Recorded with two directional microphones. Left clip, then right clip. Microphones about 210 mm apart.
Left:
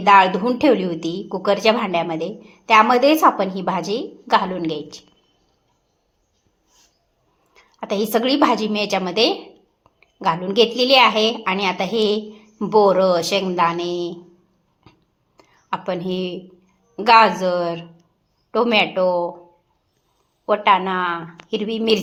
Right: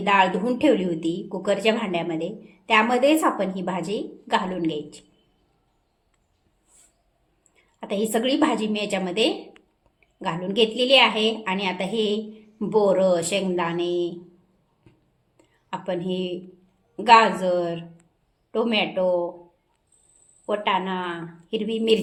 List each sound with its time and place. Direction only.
0.0 s a woman's voice: 10° left (ahead or behind)
7.5 s a woman's voice: 10° left (ahead or behind)
10.0 s a sound: 15° left (ahead or behind)
10.5 s a woman's voice: 15° left (ahead or behind)
15.4 s a woman's voice: 15° left (ahead or behind)
20.4 s a woman's voice: 15° left (ahead or behind)